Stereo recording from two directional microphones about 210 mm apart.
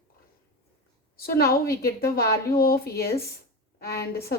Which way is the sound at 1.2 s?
45° left (ahead or behind).